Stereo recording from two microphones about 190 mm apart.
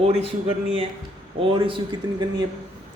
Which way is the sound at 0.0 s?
30° right (ahead or behind).